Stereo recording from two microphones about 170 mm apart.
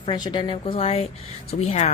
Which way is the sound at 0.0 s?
25° left (ahead or behind).